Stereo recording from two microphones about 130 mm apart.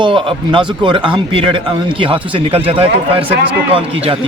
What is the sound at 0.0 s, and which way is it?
A man's voice, 40° right (ahead or behind).